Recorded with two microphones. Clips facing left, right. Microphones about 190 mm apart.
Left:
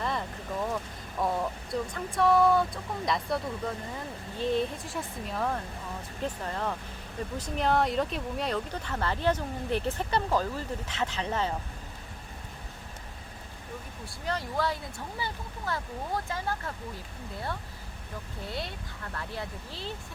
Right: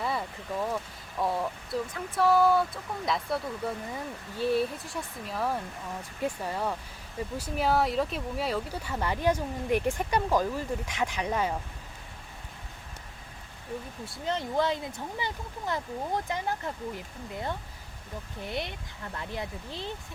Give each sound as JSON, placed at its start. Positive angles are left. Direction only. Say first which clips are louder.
{"t": 0.0, "sound": "a sound", "louder": "right 1 dB", "side_deg": -5}
{"t": 3.1, "sound": "speech", "louder": "even", "side_deg": 0}
{"t": 14.3, "sound": "speech", "louder": "right 3 dB", "side_deg": -20}